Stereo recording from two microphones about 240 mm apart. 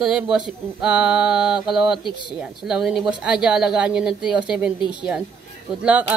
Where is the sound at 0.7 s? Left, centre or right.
Centre.